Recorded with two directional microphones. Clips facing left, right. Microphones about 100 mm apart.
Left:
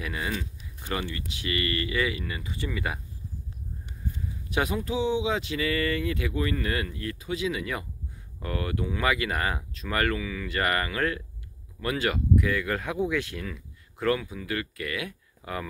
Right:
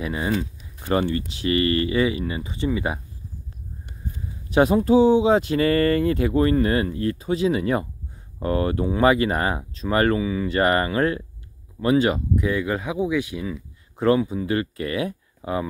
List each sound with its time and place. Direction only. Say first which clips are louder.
0.0 s speech: right 7 dB; 25° right (ahead or behind)
4.5 s speech: right 11 dB; 35° right (ahead or behind)